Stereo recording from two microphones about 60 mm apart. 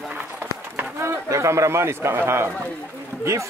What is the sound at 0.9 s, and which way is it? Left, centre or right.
Speech, right.